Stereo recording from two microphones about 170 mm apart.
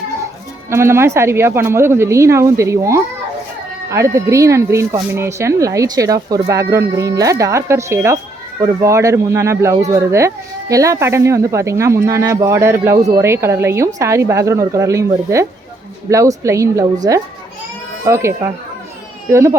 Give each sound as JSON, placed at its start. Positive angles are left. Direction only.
{"t": 0.7, "sound": "a woman's voice", "side_deg": -15}
{"t": 18.0, "sound": "speech", "side_deg": -15}